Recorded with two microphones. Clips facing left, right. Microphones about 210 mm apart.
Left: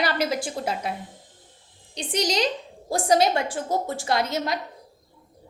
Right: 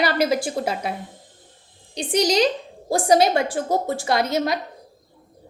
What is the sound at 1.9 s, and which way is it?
Speech, 10° right (ahead or behind).